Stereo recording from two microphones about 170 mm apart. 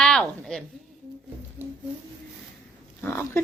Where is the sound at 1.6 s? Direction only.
15° right (ahead or behind).